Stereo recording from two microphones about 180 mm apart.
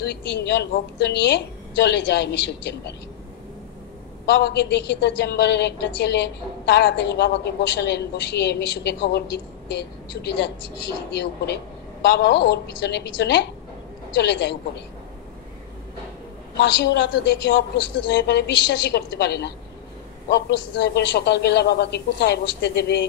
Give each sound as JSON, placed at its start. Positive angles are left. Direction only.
{"t": 0.0, "sound": "a woman's voice", "side_deg": 70}
{"t": 4.3, "sound": "a woman's voice", "side_deg": 65}
{"t": 16.5, "sound": "a woman's voice", "side_deg": 70}